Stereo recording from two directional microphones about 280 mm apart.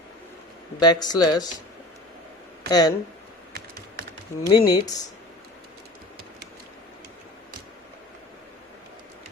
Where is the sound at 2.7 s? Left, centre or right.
Centre.